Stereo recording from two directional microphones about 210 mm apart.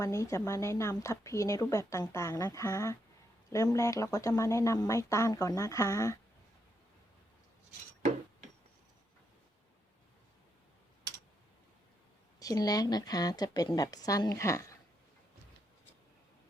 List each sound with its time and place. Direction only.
0.0 s speech: 15° left (ahead or behind)
12.4 s speech: 15° left (ahead or behind)